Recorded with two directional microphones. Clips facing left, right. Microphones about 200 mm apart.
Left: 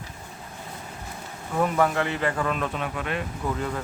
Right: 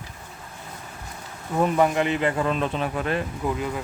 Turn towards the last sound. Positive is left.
turn(degrees=-10)  # may be behind; listen again after turning